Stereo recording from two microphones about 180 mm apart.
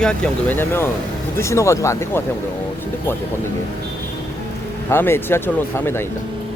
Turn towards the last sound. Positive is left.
turn(degrees=10)  # may be behind; listen again after turning